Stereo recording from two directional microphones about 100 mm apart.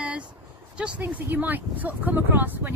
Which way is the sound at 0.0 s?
15° right (ahead or behind).